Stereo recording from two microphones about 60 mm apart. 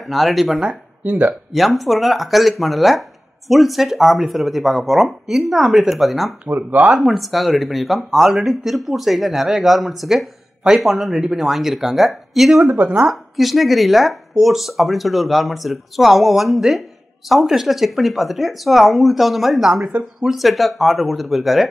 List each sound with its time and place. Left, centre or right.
0.0 s speech: centre
0.7 s speech: right
1.5 s speech: centre
6.5 s speech: right
7.1 s speech: centre
12.6 s speech: right
13.1 s speech: centre